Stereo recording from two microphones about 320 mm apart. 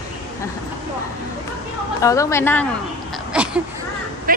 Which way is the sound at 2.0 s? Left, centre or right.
Centre.